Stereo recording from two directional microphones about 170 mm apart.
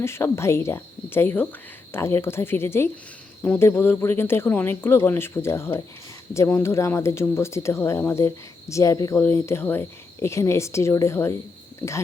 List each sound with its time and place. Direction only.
0.0 s speech: 15° left (ahead or behind)